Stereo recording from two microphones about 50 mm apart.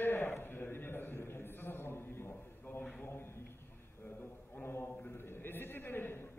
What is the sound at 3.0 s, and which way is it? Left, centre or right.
Speech, left.